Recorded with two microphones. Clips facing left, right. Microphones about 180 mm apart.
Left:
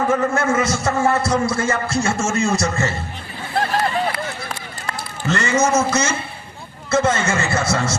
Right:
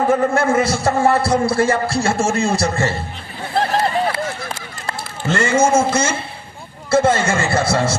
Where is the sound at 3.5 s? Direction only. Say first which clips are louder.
Right 2 dB; 30° right (ahead or behind).